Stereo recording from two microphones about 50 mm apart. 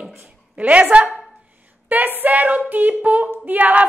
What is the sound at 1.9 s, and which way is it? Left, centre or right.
A woman's voice, right.